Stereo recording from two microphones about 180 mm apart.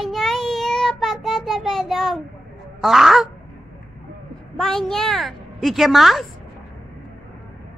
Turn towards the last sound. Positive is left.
turn(degrees=0)  # may be behind; listen again after turning